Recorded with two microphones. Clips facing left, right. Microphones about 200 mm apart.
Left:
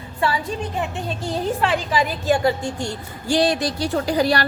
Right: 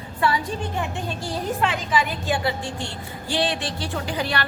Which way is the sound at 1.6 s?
35° left (ahead or behind).